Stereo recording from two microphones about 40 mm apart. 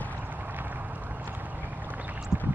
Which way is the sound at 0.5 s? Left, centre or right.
Right.